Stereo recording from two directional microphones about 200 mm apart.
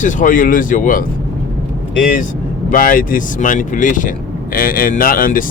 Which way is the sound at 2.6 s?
45° left (ahead or behind).